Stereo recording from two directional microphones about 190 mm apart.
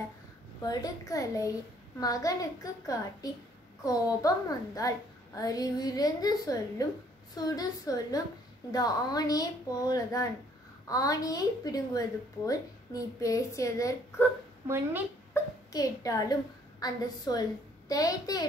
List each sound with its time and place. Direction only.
0.7 s a woman's voice: 20° left (ahead or behind)
3.8 s a woman's voice: 20° left (ahead or behind)
14.7 s a woman's voice: 10° right (ahead or behind)
15.3 s a child's voice: 20° left (ahead or behind)